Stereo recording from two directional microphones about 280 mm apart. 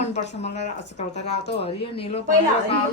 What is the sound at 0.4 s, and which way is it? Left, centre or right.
Speech, left.